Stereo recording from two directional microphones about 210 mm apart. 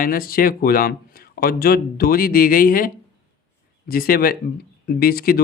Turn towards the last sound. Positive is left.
turn(degrees=45)  # may be behind; listen again after turning